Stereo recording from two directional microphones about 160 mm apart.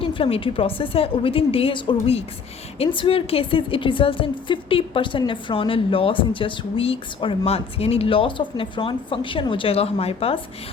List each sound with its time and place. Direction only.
0.0 s a woman's voice: 35° left (ahead or behind)